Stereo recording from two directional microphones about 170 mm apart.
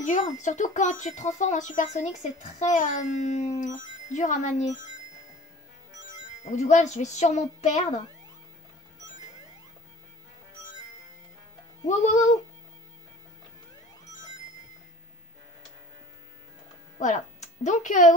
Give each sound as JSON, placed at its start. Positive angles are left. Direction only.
{"t": 0.0, "sound": "speech", "side_deg": 45}
{"t": 6.4, "sound": "speech", "side_deg": 40}
{"t": 11.9, "sound": "speech", "side_deg": 40}
{"t": 17.0, "sound": "speech", "side_deg": 45}